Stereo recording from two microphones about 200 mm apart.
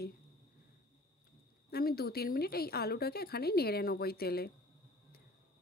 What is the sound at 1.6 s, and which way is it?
A woman's voice, 50° left (ahead or behind).